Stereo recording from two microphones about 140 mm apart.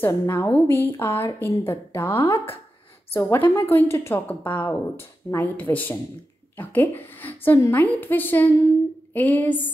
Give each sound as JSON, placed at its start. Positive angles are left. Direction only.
{"t": 0.0, "sound": "a woman's voice", "side_deg": 15}